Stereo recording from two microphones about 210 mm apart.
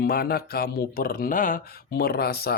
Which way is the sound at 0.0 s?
45° left (ahead or behind).